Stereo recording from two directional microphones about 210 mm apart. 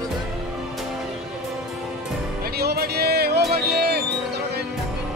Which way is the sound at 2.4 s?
50° right (ahead or behind).